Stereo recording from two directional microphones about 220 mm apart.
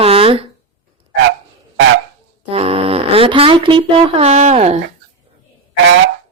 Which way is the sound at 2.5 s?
25° right (ahead or behind).